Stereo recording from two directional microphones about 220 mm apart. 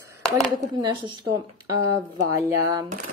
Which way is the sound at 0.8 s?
20° right (ahead or behind).